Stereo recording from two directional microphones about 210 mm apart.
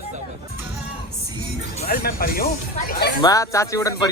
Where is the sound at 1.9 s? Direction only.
45° left (ahead or behind).